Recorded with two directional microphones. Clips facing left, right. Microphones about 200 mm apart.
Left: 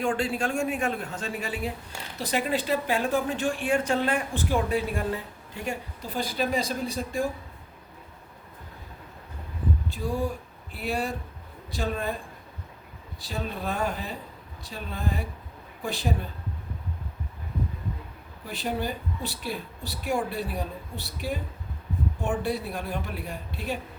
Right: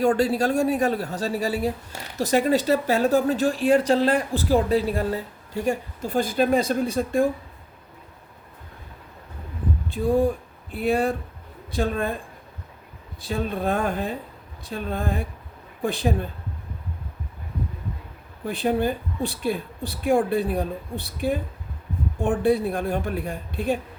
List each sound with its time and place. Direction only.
0.0 s a woman's voice: 40° right (ahead or behind)
5.6 s a woman's voice: 50° right (ahead or behind)
9.9 s a woman's voice: 55° right (ahead or behind)
13.2 s a woman's voice: 50° right (ahead or behind)
18.4 s a woman's voice: 55° right (ahead or behind)